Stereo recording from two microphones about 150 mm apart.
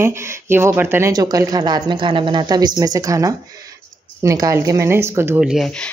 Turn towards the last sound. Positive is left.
turn(degrees=-5)  # may be behind; listen again after turning